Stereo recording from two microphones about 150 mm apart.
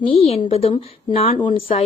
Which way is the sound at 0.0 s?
40° left (ahead or behind).